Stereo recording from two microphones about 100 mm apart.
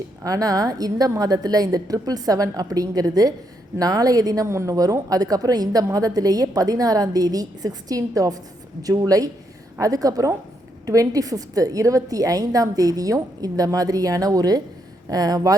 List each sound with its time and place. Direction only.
0.3 s a woman's voice: 40° right (ahead or behind)